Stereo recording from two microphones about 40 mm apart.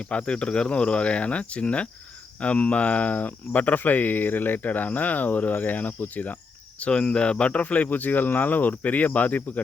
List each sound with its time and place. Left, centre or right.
0.0 s speech: left
6.7 s speech: left
7.6 s speech: left